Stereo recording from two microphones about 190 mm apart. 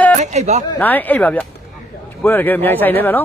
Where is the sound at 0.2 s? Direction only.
35° right (ahead or behind).